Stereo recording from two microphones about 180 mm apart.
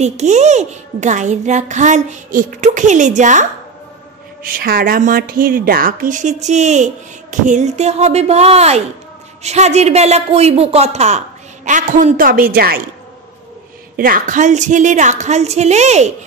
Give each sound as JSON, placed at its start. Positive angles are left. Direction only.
{"t": 0.0, "sound": "a child's voice", "side_deg": -40}
{"t": 4.4, "sound": "a woman's voice", "side_deg": -55}
{"t": 13.9, "sound": "a child's voice", "side_deg": -50}